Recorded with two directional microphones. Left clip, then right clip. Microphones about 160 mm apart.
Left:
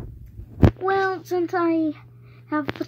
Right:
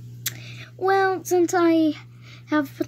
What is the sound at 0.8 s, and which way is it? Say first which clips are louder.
A child's voice: right 2 dB; 35° right (ahead or behind).